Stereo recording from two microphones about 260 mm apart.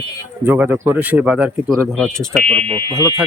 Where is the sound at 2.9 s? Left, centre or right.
Centre.